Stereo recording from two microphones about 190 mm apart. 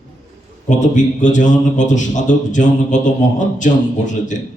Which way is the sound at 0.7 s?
40° left (ahead or behind).